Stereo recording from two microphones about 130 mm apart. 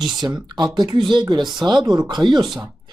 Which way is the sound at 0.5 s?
35° right (ahead or behind).